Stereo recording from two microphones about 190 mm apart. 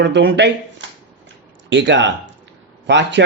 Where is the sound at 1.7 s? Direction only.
70° right (ahead or behind).